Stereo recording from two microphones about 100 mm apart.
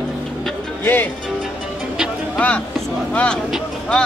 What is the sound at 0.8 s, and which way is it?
Speech, 20° left (ahead or behind).